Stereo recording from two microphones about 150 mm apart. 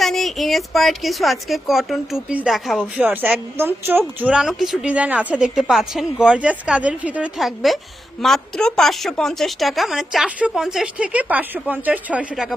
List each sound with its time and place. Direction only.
0.0 s a woman's voice: centre (ahead or behind)